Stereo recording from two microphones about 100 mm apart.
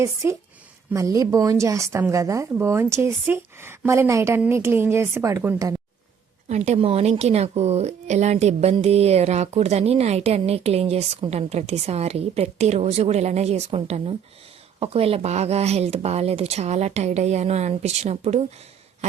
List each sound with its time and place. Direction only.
0.0 s a woman's voice: 30° right (ahead or behind)
6.6 s a woman's voice: 85° right